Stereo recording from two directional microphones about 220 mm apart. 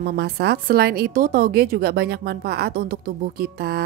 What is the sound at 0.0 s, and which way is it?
A woman's voice, 45° right (ahead or behind).